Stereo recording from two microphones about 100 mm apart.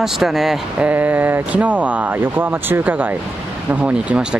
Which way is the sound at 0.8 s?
15° right (ahead or behind).